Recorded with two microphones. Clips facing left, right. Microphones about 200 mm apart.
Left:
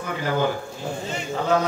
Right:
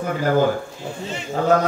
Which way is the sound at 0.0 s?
45° right (ahead or behind).